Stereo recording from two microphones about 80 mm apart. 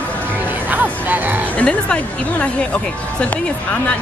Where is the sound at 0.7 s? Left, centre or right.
Right.